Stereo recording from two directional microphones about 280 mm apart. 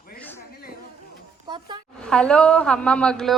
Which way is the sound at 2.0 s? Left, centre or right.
Centre.